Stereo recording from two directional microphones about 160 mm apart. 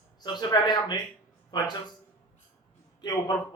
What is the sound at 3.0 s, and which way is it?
Speech, 25° left (ahead or behind).